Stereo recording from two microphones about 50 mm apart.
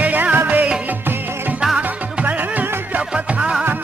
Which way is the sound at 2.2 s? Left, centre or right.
Right.